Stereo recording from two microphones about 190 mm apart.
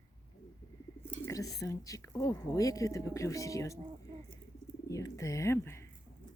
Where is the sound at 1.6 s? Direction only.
15° left (ahead or behind).